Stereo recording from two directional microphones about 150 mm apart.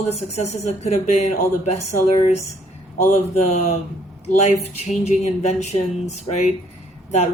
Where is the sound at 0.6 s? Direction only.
50° left (ahead or behind).